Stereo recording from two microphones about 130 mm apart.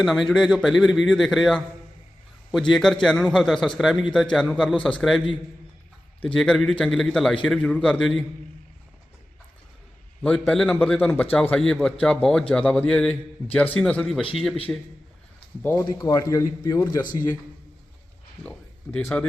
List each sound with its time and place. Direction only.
0.0 s a man's voice: centre (ahead or behind)
6.2 s a man's voice: 5° left (ahead or behind)
10.2 s a man's voice: 5° left (ahead or behind)
15.9 s a man's voice: 30° left (ahead or behind)
18.4 s speech: 15° left (ahead or behind)